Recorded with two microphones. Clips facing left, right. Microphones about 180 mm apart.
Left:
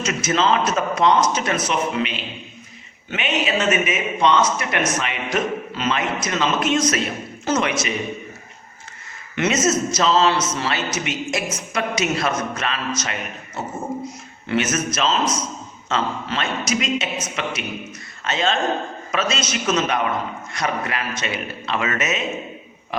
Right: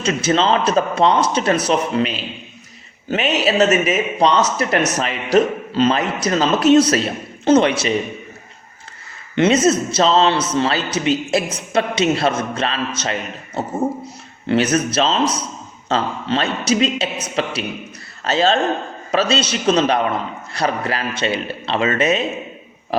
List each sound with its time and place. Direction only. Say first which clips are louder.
0.0 s speech: right 3 dB; 30° right (ahead or behind)
9.3 s a man's voice: right 5 dB; 30° right (ahead or behind)